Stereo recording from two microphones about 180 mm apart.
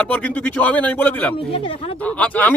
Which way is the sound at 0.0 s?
10° left (ahead or behind).